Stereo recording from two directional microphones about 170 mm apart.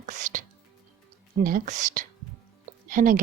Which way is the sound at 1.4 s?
50° right (ahead or behind).